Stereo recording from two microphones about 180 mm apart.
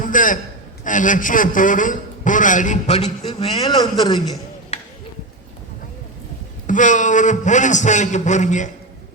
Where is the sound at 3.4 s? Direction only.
25° left (ahead or behind).